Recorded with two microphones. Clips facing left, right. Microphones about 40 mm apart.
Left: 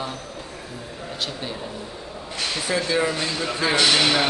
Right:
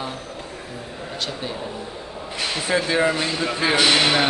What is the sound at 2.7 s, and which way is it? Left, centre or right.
Speech, right.